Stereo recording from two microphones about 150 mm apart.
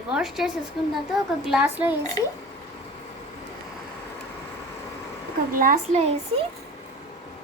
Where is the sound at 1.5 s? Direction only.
10° right (ahead or behind).